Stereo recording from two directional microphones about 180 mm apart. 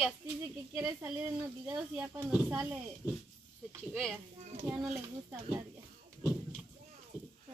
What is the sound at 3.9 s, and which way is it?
Speech, centre (ahead or behind).